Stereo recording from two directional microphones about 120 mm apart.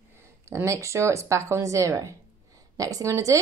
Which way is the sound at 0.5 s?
25° right (ahead or behind).